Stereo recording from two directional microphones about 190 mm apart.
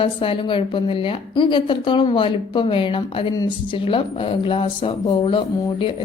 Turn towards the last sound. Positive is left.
turn(degrees=25)  # may be behind; listen again after turning